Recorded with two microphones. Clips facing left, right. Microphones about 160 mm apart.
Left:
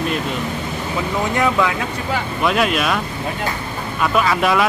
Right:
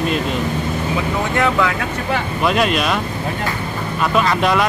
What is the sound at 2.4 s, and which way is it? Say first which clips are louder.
Speech: even; centre (ahead or behind).